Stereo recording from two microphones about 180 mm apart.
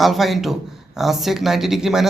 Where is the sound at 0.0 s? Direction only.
Centre (ahead or behind).